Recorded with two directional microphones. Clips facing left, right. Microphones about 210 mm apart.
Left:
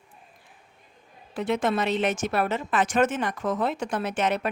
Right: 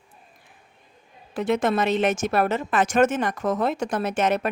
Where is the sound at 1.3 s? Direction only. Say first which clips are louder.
Right 3 dB; 45° right (ahead or behind).